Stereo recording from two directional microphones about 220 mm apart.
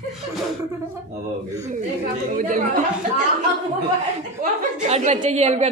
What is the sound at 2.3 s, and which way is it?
Speech, 40° right (ahead or behind).